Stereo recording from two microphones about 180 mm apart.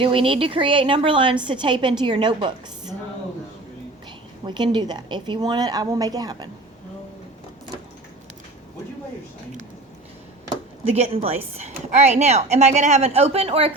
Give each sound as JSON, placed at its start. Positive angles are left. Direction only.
{"t": 0.0, "sound": "a woman's voice", "side_deg": -30}
{"t": 4.4, "sound": "a woman's voice", "side_deg": -25}
{"t": 10.9, "sound": "a woman's voice", "side_deg": -35}